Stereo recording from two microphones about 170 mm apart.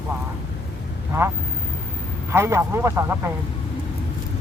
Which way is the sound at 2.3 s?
15° right (ahead or behind).